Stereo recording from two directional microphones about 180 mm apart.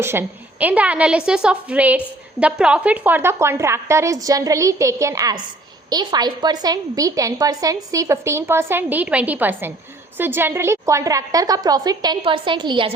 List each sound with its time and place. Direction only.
0.0 s a woman's voice: 10° right (ahead or behind)